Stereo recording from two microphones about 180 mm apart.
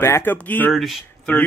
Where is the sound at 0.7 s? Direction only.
Centre (ahead or behind).